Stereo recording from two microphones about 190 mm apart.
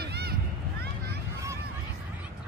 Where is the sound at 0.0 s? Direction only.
55° right (ahead or behind).